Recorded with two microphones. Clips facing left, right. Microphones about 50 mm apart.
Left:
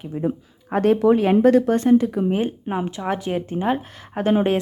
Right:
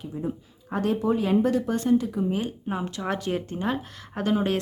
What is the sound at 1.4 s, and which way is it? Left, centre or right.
Speech, left.